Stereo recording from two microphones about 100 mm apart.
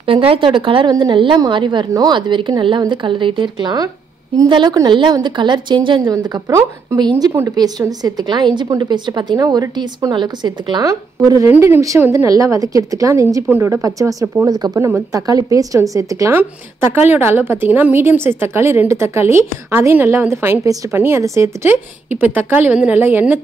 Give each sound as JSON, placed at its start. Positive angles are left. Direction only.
{"t": 0.0, "sound": "a woman's voice", "side_deg": -65}
{"t": 12.3, "sound": "a woman's voice", "side_deg": -35}
{"t": 16.9, "sound": "a woman's voice", "side_deg": -25}